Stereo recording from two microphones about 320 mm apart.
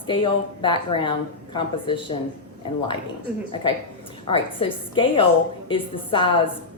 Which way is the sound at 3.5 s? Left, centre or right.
Centre.